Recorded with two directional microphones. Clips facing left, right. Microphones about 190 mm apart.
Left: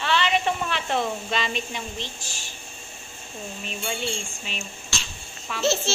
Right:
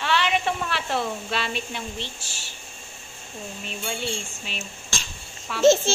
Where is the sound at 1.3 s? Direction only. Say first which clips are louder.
Left 1 dB; 5° right (ahead or behind).